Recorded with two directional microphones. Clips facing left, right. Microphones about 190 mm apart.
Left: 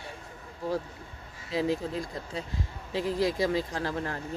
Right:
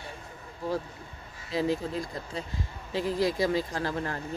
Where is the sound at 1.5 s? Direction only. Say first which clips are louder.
Even; centre (ahead or behind).